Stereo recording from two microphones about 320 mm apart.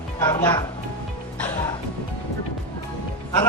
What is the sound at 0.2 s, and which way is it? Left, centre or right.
Speech, centre.